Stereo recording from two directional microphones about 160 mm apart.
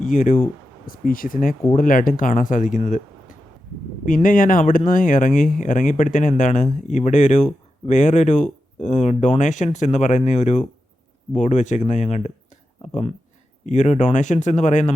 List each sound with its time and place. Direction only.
0.0 s speech: 55° left (ahead or behind)